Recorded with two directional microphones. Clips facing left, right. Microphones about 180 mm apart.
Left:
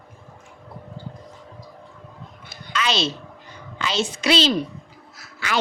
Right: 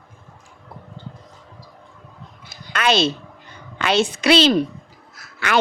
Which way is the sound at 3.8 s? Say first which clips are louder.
Right 6 dB; 60° right (ahead or behind).